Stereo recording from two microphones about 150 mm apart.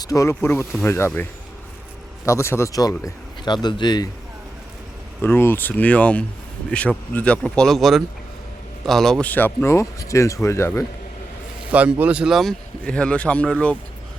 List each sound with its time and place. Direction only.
0.0 s speech: 20° left (ahead or behind)
5.2 s speech: 15° left (ahead or behind)
11.7 s speech: 10° right (ahead or behind); by 13.7 s 10° left (ahead or behind)